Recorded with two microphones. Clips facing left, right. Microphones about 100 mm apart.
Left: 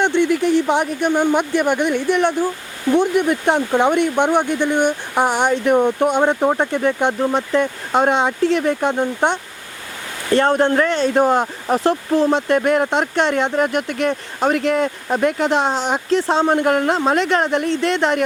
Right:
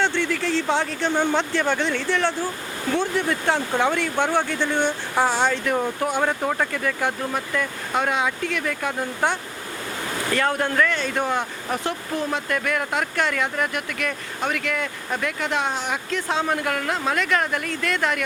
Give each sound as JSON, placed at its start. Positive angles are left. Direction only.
{"t": 0.0, "sound": "speech", "side_deg": 20}